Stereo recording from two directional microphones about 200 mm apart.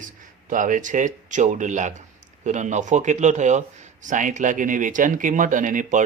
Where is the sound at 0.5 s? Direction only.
40° right (ahead or behind).